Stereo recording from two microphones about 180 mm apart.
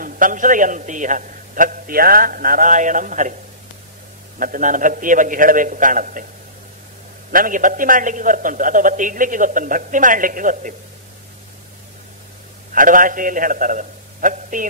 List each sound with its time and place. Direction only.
0.0 s a man's voice: 50° right (ahead or behind)
4.4 s a man's voice: 50° right (ahead or behind)
7.2 s a man's voice: 50° right (ahead or behind)
12.7 s a man's voice: 50° right (ahead or behind)